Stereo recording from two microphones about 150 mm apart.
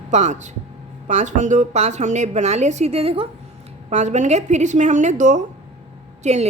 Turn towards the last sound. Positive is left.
turn(degrees=-45)  # may be behind; listen again after turning